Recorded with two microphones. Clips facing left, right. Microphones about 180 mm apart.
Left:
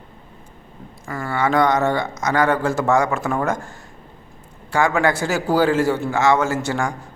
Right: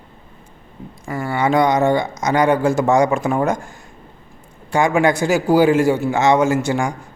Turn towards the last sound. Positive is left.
turn(degrees=-15)  # may be behind; listen again after turning